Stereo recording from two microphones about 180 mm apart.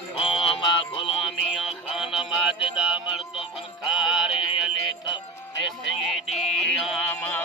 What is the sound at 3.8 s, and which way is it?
Music, 5° right (ahead or behind).